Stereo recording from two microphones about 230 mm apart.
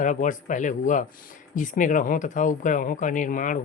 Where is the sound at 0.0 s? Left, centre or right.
Left.